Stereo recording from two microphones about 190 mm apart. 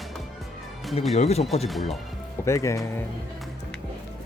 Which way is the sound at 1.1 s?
35° left (ahead or behind).